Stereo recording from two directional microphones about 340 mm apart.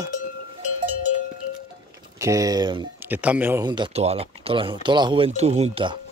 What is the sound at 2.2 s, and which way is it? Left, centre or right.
Speech, centre.